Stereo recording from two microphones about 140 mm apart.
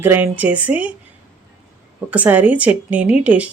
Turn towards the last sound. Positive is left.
turn(degrees=-10)  # may be behind; listen again after turning